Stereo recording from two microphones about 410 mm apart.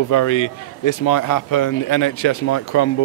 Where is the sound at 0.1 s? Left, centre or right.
Left.